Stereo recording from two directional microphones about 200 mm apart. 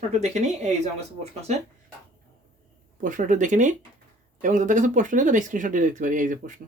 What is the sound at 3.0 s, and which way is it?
Speech, 40° right (ahead or behind).